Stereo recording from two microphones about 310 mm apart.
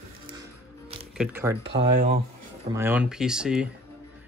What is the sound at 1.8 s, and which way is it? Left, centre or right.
Speech, right.